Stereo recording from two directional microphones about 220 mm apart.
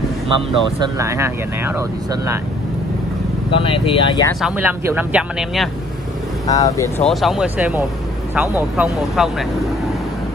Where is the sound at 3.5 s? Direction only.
25° left (ahead or behind).